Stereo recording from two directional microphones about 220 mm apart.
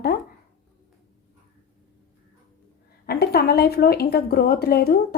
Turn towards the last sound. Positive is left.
turn(degrees=45)  # may be behind; listen again after turning